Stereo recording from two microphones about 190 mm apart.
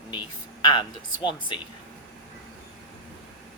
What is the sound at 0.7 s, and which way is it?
Speech, 25° left (ahead or behind).